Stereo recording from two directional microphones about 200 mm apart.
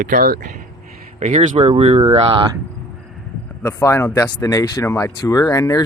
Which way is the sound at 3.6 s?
15° left (ahead or behind).